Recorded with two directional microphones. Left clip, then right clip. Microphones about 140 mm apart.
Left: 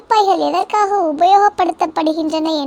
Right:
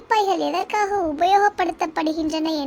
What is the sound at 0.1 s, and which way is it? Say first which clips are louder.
A child's voice: left 7 dB; 25° left (ahead or behind).